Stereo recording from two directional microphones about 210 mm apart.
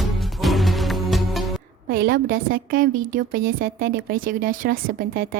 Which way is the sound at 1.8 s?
45° right (ahead or behind).